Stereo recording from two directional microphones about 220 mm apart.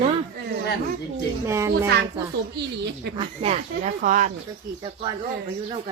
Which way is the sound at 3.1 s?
25° right (ahead or behind).